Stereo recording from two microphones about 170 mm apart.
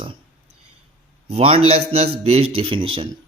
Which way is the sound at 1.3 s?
35° right (ahead or behind).